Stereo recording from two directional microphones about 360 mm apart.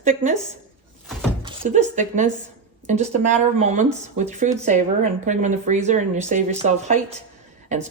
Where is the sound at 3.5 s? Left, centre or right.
Centre.